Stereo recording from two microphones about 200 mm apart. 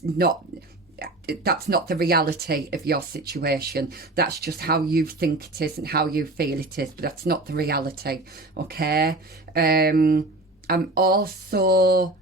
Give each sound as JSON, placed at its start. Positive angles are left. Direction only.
{"t": 0.9, "sound": "speech", "side_deg": -50}